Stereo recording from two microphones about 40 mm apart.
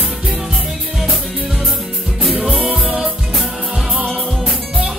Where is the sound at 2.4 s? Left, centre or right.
Centre.